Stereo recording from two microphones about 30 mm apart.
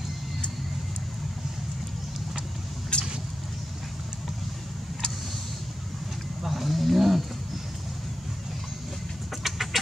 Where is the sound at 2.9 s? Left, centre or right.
Left.